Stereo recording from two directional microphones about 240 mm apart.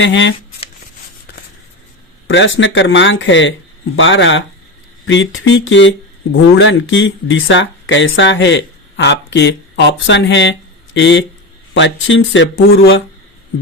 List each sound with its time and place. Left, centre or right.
0.0 s speech: left
2.2 s speech: left